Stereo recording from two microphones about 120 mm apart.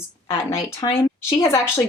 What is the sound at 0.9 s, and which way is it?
Speech, 50° left (ahead or behind).